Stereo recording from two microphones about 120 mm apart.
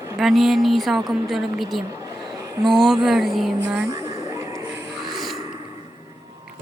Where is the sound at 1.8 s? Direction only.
30° right (ahead or behind).